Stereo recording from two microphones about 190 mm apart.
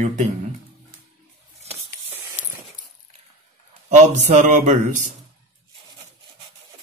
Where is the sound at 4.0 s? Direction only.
40° right (ahead or behind).